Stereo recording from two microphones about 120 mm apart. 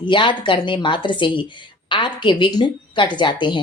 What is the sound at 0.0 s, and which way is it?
A woman's voice, 40° left (ahead or behind).